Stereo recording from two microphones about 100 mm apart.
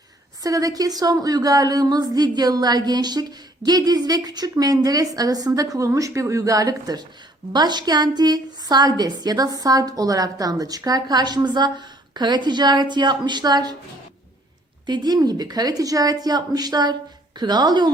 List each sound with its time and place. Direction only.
0.4 s a woman's voice: 35° right (ahead or behind)
14.8 s a woman's voice: 45° right (ahead or behind)